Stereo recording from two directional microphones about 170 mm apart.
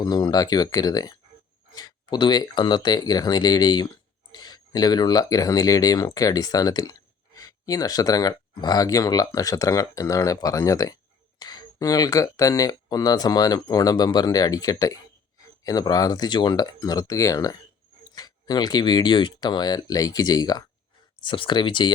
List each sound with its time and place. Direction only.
0.0 s speech: 25° left (ahead or behind)